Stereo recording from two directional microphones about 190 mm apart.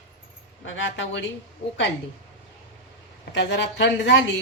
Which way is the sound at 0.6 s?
85° left.